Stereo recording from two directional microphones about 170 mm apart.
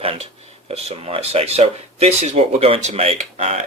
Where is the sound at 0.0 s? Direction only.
35° right (ahead or behind).